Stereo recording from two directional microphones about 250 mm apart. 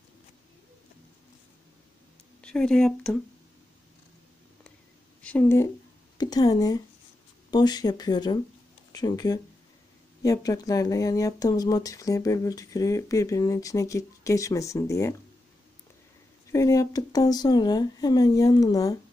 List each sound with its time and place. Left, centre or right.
2.4 s speech: centre
5.2 s speech: centre
16.5 s speech: centre